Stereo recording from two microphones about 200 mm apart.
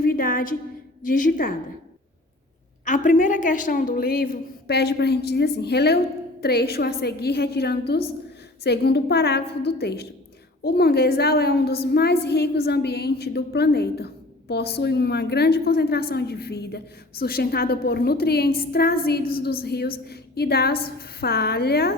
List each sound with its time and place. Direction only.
0.0 s a sound: 45° left (ahead or behind)
1.0 s a woman's voice: 40° left (ahead or behind)
2.8 s a woman's voice: 40° left (ahead or behind)